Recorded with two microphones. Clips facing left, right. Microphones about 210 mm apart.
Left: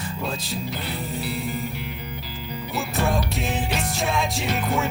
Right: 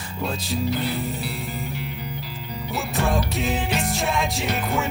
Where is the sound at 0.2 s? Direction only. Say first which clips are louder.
Right 6 dB; centre (ahead or behind).